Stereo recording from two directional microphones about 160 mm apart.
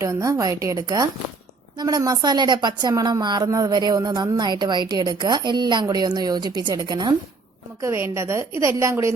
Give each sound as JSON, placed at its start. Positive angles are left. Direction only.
{"t": 0.0, "sound": "a woman's voice", "side_deg": -20}